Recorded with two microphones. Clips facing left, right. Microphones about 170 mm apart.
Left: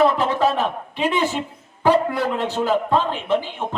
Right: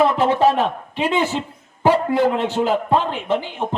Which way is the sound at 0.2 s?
25° right (ahead or behind).